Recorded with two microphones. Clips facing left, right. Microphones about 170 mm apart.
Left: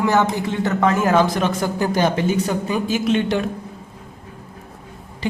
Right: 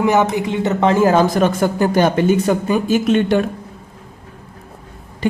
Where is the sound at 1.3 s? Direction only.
50° right (ahead or behind).